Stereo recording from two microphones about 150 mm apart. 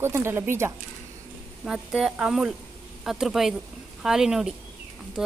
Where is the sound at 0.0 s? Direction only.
15° right (ahead or behind).